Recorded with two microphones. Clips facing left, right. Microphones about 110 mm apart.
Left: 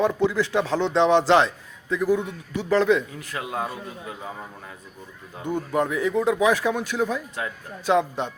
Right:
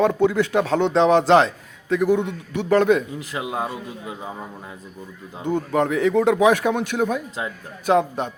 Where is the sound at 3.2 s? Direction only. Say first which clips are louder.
Right 3 dB; 20° right (ahead or behind).